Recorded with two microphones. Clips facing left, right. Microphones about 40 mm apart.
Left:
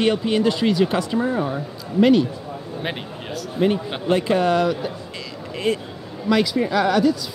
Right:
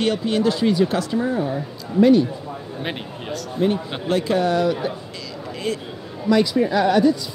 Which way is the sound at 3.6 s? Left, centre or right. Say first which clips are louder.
Left 1 dB; centre.